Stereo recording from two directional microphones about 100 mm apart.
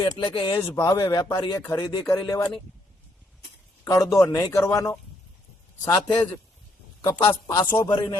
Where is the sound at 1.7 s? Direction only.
35° left (ahead or behind).